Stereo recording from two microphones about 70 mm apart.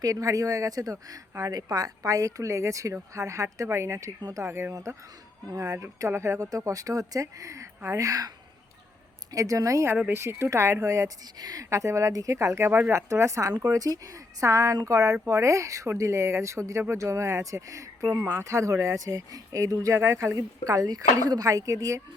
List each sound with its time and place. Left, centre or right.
0.0 s speech: right
2.0 s speech: right
4.2 s speech: right
4.4 s speech: right
4.7 s speech: right
6.4 s speech: right
9.3 s speech: right
10.1 s speech: right
11.3 s a woman's voice: right
11.7 s speech: right
13.5 s speech: right
20.0 s speech: right